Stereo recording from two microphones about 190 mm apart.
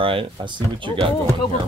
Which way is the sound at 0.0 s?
25° right (ahead or behind).